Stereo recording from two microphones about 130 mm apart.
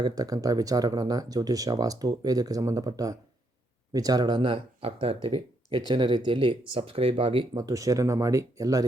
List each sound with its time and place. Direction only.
0.0 s speech: 30° right (ahead or behind)
7.5 s speech: 25° right (ahead or behind)